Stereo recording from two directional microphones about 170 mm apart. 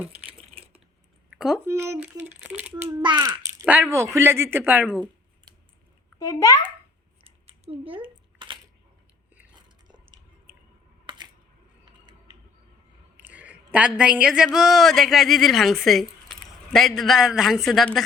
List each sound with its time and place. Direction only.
0.3 s a sound: 35° right (ahead or behind)
1.3 s speech: 5° right (ahead or behind)
1.6 s speech: 15° right (ahead or behind)
3.0 s a child's voice: 25° right (ahead or behind); by 5.0 s 10° right (ahead or behind)
6.1 s a child's voice: 20° left (ahead or behind)
7.3 s a sound: 35° right (ahead or behind)
8.4 s camera: 30° right (ahead or behind)
11.1 s a sound: 30° right (ahead or behind)
13.1 s speech: 10° right (ahead or behind)